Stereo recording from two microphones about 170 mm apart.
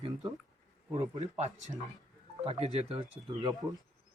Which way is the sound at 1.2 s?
45° right (ahead or behind).